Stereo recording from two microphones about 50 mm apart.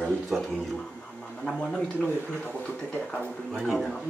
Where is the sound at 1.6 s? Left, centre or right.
Centre.